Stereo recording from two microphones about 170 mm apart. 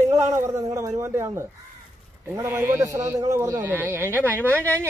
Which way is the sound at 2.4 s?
15° right (ahead or behind).